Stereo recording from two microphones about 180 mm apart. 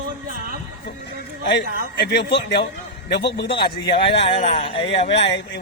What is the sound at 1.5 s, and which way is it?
A man's voice, 70° left (ahead or behind).